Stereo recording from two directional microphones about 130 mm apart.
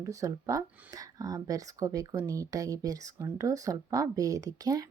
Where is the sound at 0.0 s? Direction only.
25° right (ahead or behind).